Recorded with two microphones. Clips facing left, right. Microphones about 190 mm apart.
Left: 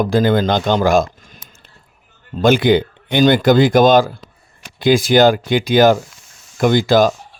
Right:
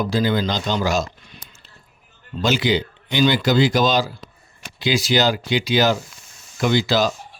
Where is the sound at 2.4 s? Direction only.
55° left (ahead or behind).